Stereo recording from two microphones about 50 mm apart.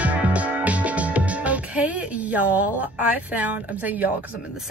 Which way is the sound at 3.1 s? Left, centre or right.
Right.